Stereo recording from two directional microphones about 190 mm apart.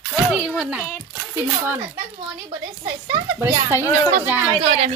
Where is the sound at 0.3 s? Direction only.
5° right (ahead or behind).